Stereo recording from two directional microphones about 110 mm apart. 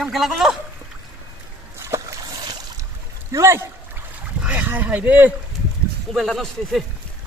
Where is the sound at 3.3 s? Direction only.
25° right (ahead or behind).